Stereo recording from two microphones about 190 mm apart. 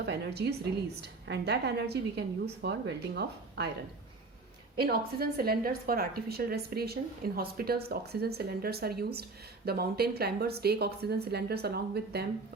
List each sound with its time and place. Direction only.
0.0 s a woman's voice: 60° right (ahead or behind)
4.8 s a woman's voice: 55° right (ahead or behind)